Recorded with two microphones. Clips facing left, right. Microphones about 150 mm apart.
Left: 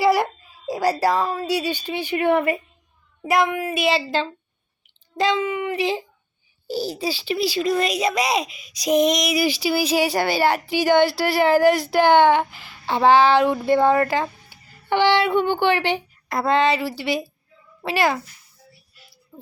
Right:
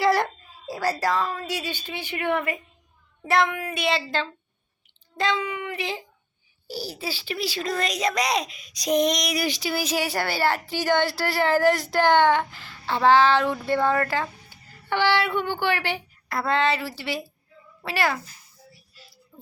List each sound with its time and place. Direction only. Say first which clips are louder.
0.0 s a child's voice: left 3 dB; 5° left (ahead or behind)
3.4 s a child's voice: left 4 dB; 20° left (ahead or behind)
19.3 s a sound: left 5 dB; 20° left (ahead or behind)